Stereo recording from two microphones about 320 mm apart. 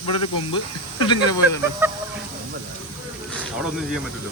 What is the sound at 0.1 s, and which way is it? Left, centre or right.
Speech, centre.